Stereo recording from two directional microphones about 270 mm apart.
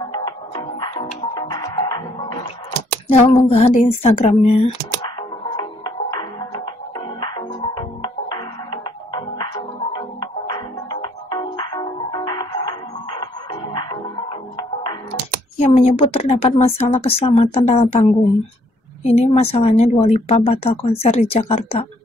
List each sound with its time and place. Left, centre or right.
0.7 s music: centre
3.1 s speech: left
5.6 s music: centre
15.5 s speech: left